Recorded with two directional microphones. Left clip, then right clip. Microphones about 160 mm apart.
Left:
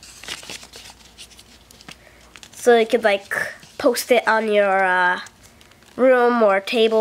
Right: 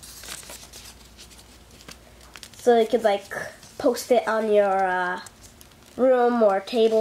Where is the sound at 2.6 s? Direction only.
30° left (ahead or behind).